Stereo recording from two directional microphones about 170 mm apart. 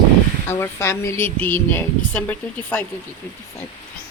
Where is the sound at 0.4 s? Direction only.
15° left (ahead or behind).